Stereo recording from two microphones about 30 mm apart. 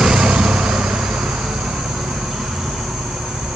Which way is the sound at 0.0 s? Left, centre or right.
Centre.